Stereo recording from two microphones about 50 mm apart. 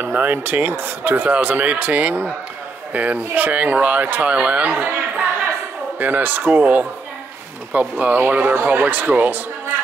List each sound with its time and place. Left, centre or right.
0.0 s a sound: right
0.4 s speech: right
5.9 s speech: right